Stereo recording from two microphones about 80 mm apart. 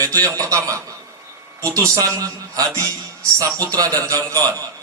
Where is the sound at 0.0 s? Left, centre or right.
Right.